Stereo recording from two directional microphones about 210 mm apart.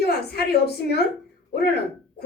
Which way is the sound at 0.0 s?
50° left (ahead or behind).